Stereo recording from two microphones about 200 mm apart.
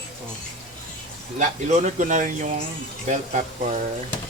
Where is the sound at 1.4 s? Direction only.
35° right (ahead or behind).